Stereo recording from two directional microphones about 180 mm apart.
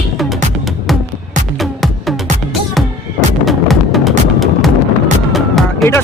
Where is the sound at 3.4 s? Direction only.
Centre (ahead or behind).